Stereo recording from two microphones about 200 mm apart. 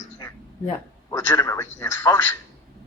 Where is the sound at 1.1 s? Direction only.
15° left (ahead or behind).